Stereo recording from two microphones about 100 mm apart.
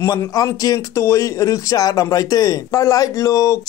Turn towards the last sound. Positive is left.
turn(degrees=35)  # may be behind; listen again after turning